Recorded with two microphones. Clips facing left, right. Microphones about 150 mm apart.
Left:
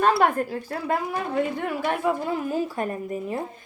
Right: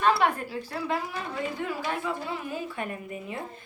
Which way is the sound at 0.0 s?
45° left (ahead or behind).